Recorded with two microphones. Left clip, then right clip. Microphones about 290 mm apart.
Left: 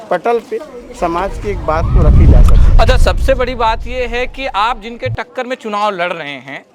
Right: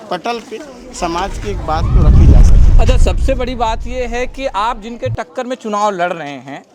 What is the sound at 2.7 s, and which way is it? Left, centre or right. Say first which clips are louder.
Speech: left 6 dB; left.